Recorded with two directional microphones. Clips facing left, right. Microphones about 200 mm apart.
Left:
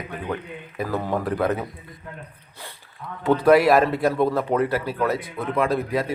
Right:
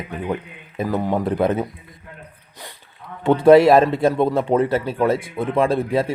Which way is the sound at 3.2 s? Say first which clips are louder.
Right 5 dB; 25° right (ahead or behind).